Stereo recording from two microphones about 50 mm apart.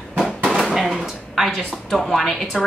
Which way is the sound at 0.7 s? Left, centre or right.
Centre.